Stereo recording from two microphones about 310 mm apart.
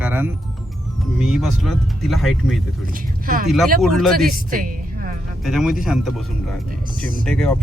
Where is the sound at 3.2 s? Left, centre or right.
Right.